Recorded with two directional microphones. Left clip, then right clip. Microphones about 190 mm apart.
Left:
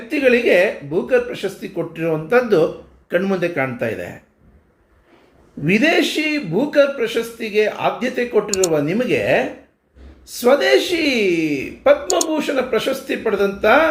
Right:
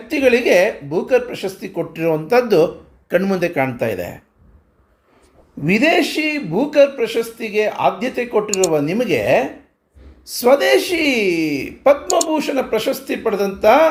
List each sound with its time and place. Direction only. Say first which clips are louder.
0.1 s speech: right 1 dB; 30° right (ahead or behind)
5.6 s speech: right 1 dB; 25° right (ahead or behind)